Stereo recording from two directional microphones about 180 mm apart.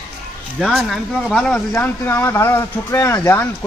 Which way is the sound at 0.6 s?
Centre (ahead or behind).